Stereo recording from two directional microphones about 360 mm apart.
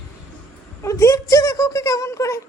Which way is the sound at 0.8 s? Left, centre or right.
Centre.